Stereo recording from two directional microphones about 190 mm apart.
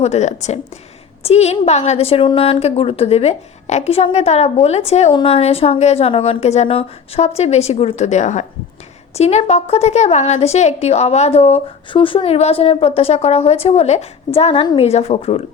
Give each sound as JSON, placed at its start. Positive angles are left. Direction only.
{"t": 0.0, "sound": "a woman's voice", "side_deg": 35}